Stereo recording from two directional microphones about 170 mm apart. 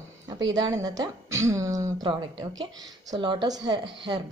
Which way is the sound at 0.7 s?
20° right (ahead or behind).